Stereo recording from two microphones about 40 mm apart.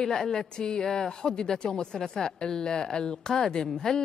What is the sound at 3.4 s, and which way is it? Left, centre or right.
Speech, centre.